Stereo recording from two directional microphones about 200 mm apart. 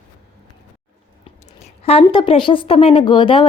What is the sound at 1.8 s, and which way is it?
A woman's voice, 30° left (ahead or behind).